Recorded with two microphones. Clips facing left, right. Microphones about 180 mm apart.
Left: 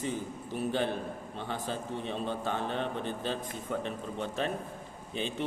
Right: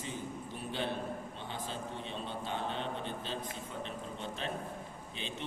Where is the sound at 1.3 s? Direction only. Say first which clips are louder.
Left 5 dB; 45° left (ahead or behind).